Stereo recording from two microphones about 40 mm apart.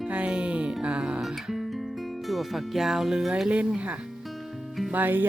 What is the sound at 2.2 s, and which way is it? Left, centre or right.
Speech, centre.